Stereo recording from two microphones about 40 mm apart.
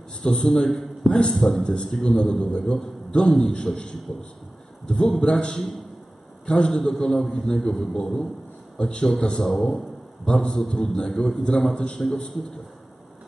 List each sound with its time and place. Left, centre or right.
0.2 s a man's voice: centre
6.8 s a man's voice: centre